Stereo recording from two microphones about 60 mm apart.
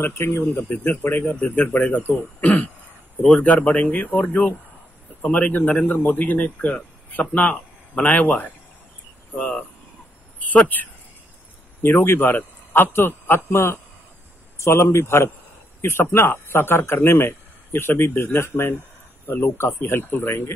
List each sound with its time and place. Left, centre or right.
0.0 s a man's voice: left
11.8 s a man's voice: left